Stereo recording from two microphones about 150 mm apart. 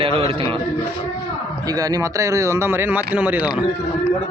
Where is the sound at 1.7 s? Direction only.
25° right (ahead or behind).